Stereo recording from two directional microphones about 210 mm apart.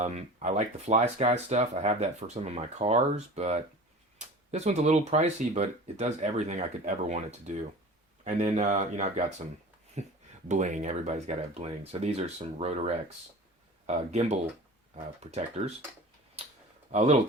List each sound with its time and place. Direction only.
0.0 s speech: 35° right (ahead or behind)
16.9 s speech: 30° right (ahead or behind)